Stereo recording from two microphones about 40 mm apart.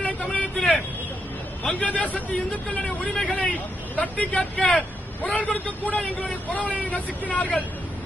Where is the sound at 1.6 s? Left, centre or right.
Left.